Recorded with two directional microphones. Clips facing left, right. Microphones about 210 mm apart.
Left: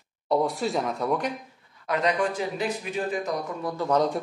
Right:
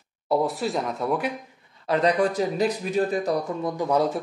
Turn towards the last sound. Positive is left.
turn(degrees=-5)  # may be behind; listen again after turning